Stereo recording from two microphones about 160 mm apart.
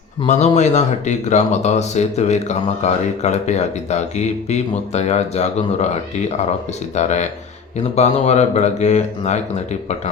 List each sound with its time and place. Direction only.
0.3 s speech: 45° left (ahead or behind)
6.9 s speech: 45° left (ahead or behind)